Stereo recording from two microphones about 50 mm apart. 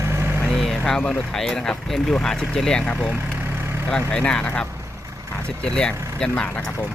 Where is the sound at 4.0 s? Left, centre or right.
Left.